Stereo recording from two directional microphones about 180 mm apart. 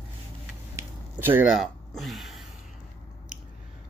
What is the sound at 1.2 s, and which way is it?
Speech, 10° right (ahead or behind).